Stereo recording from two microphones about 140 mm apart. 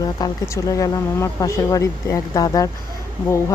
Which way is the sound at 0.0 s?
25° left (ahead or behind).